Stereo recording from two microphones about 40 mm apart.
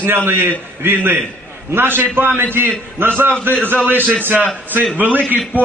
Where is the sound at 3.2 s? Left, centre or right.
Right.